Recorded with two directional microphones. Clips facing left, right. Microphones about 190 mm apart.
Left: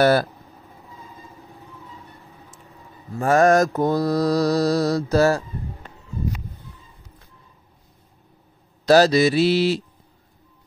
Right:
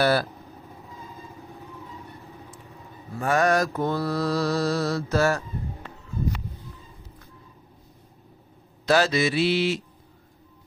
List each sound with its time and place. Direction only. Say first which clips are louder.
0.0 s speech: left 5 dB; 45° left (ahead or behind)
3.2 s mantra: left 6 dB; 45° left (ahead or behind)
8.8 s mantra: left 7 dB; 40° left (ahead or behind)